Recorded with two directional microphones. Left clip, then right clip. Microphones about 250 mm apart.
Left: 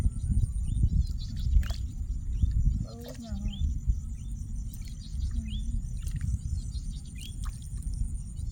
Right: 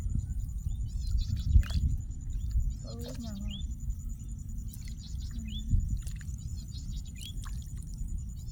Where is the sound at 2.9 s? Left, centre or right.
Centre.